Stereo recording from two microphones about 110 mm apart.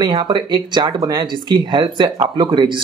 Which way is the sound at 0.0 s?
40° right (ahead or behind).